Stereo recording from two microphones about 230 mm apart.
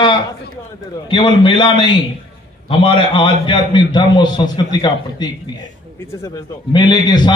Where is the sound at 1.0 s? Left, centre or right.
Centre.